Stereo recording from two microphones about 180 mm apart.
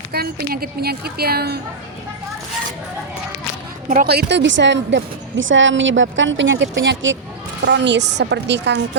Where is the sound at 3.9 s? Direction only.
60° right (ahead or behind); by 7.1 s 90° right.